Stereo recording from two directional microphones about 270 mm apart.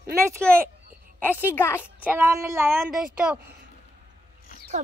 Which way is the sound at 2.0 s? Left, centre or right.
Centre.